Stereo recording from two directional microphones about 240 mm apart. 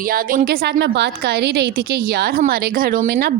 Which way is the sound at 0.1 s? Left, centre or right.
Right.